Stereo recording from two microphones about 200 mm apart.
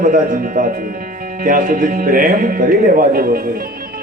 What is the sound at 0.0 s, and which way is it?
Speech, 45° right (ahead or behind).